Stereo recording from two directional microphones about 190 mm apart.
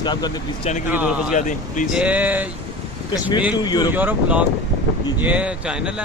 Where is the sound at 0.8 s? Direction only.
10° right (ahead or behind).